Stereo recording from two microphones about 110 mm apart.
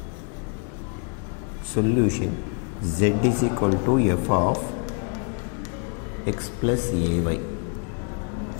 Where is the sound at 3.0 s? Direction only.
15° left (ahead or behind).